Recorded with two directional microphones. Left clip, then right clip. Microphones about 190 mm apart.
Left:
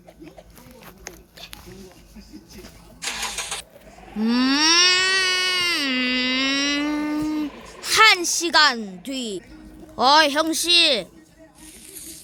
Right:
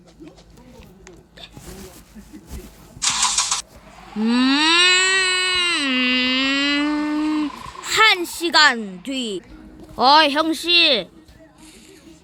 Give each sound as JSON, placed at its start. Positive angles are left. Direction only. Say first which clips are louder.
{"t": 3.0, "sound": "engine starting", "louder": "right 8 dB", "side_deg": 0}
{"t": 4.0, "sound": "a sound", "louder": "right 2 dB", "side_deg": 0}
{"t": 9.9, "sound": "speech", "louder": "right 2 dB", "side_deg": 0}